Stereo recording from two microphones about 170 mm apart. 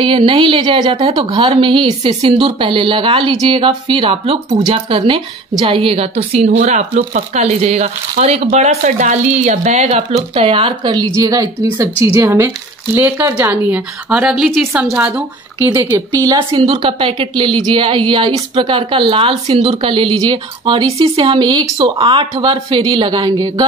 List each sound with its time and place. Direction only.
0.0 s a woman's voice: 30° right (ahead or behind)